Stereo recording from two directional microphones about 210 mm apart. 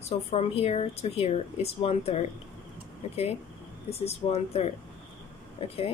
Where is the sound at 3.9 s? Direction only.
30° left (ahead or behind).